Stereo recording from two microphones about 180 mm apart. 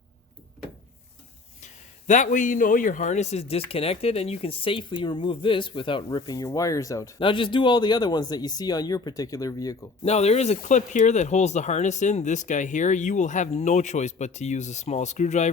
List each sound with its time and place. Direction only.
1.6 s a man's voice: 45° left (ahead or behind); by 9.7 s 20° left (ahead or behind)
10.0 s speech: 35° left (ahead or behind)